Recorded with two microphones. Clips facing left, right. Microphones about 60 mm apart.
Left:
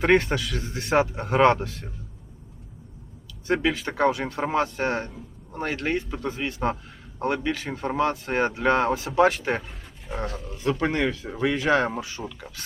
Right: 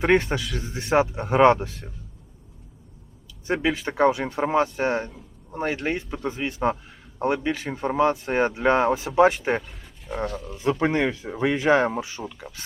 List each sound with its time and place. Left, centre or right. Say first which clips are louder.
0.0 s speech: even; centre
1.3 s speech: right 2 dB; centre
3.4 s a man's voice: even; centre
9.6 s a sound: right 1 dB; centre
10.2 s speech: right 3 dB; centre
10.6 s speech: right 2 dB; centre